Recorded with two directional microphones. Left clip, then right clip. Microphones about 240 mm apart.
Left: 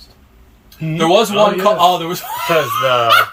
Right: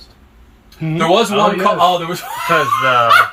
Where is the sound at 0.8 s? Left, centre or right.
Centre.